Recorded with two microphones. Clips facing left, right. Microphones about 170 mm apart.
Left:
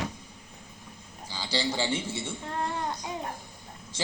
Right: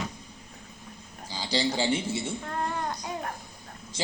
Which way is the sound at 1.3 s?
15° right (ahead or behind).